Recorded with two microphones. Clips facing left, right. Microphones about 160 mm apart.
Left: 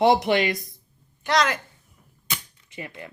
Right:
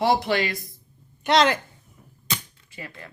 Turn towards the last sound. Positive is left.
turn(degrees=20)  # may be behind; listen again after turning